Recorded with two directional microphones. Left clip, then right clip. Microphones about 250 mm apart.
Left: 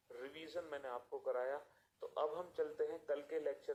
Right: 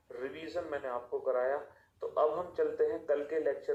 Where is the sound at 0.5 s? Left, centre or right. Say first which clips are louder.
Right 8 dB; left.